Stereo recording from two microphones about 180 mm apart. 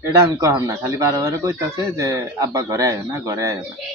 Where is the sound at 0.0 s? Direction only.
15° right (ahead or behind).